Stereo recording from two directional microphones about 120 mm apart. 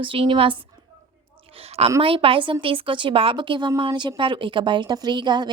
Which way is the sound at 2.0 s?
50° right (ahead or behind).